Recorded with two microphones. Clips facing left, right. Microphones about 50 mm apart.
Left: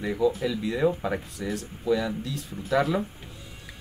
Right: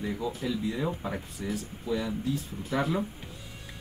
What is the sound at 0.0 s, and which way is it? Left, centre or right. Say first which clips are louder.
Speech: left 7 dB; left.